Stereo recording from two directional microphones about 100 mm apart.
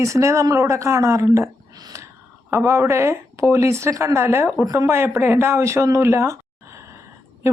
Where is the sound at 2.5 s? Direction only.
25° right (ahead or behind).